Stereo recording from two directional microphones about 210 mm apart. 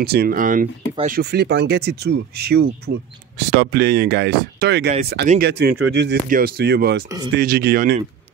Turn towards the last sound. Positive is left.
turn(degrees=-50)  # may be behind; listen again after turning